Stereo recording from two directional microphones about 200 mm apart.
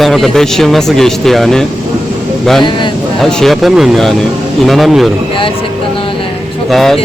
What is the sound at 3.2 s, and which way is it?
Speech, centre (ahead or behind).